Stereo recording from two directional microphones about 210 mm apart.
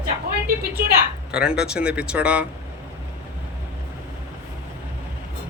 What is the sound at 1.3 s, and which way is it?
Speech, 5° right (ahead or behind).